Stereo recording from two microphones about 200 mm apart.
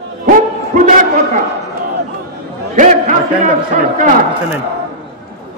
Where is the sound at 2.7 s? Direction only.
40° right (ahead or behind).